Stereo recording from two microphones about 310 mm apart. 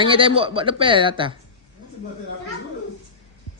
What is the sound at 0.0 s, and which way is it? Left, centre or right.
Speech, centre.